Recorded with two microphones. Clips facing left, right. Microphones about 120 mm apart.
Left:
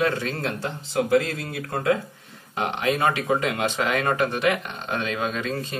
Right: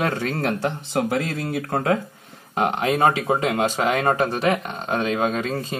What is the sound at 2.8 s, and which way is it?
Speech, 35° right (ahead or behind).